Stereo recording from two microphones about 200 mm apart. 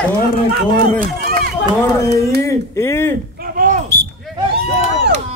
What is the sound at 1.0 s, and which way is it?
Speech, 45° right (ahead or behind).